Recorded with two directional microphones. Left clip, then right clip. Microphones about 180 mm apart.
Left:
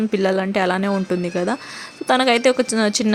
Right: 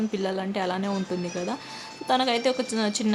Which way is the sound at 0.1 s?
35° left (ahead or behind).